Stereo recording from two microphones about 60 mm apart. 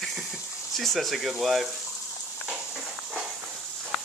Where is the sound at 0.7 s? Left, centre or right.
Centre.